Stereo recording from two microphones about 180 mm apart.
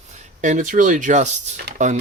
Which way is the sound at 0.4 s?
45° right (ahead or behind).